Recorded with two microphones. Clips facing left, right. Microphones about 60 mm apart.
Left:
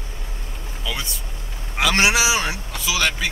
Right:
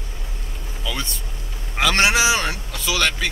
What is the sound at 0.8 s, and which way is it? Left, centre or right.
Speech, centre.